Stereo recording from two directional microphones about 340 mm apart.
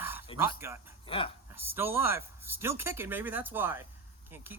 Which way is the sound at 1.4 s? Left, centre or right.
Centre.